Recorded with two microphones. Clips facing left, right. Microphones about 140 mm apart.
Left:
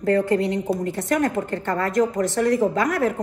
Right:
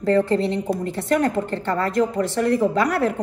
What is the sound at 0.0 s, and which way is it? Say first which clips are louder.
A woman's voice: right 1 dB; 30° right (ahead or behind).